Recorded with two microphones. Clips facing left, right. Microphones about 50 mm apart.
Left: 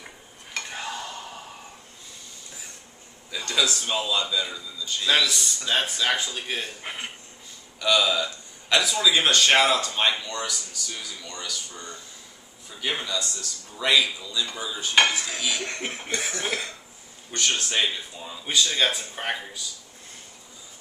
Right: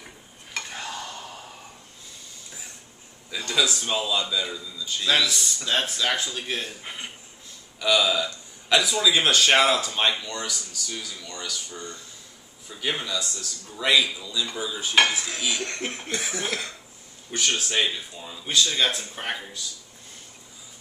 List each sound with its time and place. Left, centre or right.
0.6 s stir: centre
3.3 s speech: centre
6.8 s speech: centre
7.8 s speech: centre
16.1 s speech: centre